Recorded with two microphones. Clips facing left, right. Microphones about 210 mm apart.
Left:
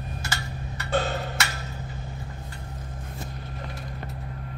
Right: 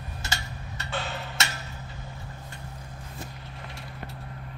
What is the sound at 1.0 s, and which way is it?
Tick-tock, 45° left (ahead or behind).